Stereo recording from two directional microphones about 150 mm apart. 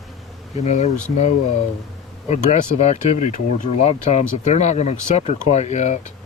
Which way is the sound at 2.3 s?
50° left (ahead or behind).